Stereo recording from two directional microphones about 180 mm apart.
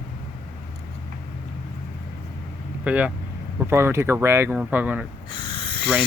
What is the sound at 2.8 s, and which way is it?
Speech, 10° right (ahead or behind).